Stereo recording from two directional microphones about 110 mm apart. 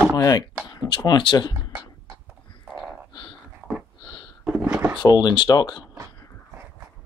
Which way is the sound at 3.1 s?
45° left (ahead or behind).